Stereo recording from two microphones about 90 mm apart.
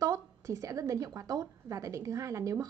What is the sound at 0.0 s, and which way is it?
A woman's voice, 35° right (ahead or behind).